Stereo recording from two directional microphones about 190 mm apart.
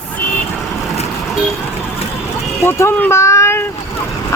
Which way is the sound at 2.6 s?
15° left (ahead or behind).